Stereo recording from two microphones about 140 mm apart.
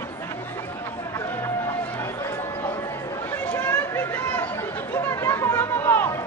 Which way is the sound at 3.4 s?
15° left (ahead or behind).